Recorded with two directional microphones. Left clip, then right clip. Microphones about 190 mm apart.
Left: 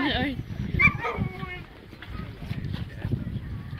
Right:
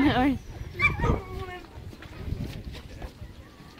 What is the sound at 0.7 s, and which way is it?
Dog, 45° right (ahead or behind).